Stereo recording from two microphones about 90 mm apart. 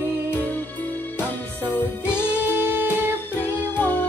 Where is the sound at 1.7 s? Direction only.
20° left (ahead or behind).